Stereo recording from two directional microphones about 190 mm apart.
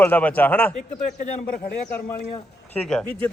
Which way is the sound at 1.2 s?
40° left (ahead or behind).